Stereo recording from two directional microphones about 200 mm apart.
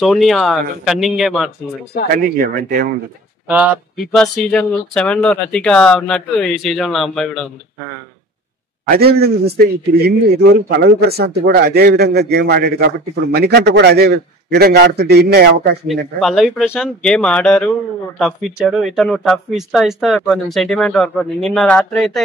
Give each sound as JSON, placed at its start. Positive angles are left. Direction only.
{"t": 0.0, "sound": "speech", "side_deg": 0}
{"t": 2.1, "sound": "a man's voice", "side_deg": -45}
{"t": 3.4, "sound": "speech", "side_deg": -5}
{"t": 8.8, "sound": "a man's voice", "side_deg": -50}
{"t": 16.2, "sound": "speech", "side_deg": 0}